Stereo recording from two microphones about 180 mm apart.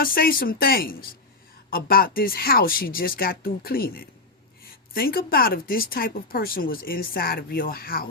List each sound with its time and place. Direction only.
0.0 s speech: 55° left (ahead or behind)